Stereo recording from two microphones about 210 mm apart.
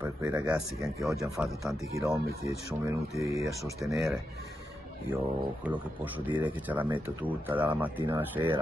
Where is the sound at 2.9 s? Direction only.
15° right (ahead or behind).